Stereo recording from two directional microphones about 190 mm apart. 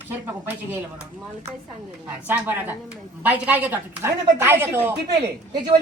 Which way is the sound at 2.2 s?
10° right (ahead or behind).